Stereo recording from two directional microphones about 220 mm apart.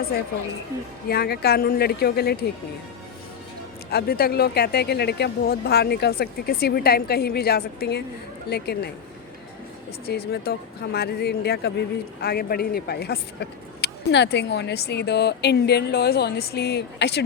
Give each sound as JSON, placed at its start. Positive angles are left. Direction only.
{"t": 1.0, "sound": "speech", "side_deg": 45}
{"t": 3.9, "sound": "speech", "side_deg": 45}
{"t": 10.1, "sound": "speech", "side_deg": 45}